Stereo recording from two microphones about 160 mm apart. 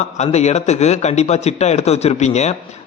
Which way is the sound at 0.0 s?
45° left (ahead or behind).